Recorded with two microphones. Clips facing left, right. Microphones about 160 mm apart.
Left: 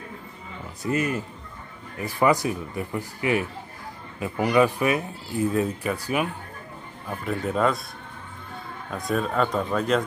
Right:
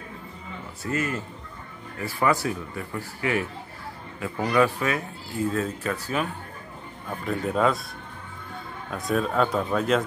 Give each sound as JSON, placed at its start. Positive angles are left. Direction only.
{"t": 0.8, "sound": "speech", "side_deg": 20}
{"t": 7.1, "sound": "speech", "side_deg": 0}
{"t": 8.9, "sound": "speech", "side_deg": 0}